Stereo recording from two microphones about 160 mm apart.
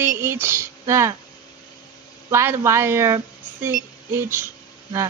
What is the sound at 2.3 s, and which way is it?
A woman's voice, 15° right (ahead or behind).